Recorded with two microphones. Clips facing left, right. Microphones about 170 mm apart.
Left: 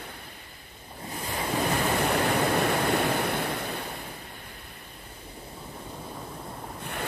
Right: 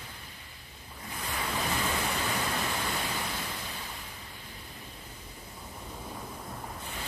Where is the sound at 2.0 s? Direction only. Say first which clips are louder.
Left 8 dB; 65° left (ahead or behind).